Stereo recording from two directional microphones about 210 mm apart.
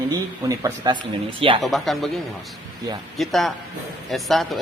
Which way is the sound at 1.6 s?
Centre (ahead or behind).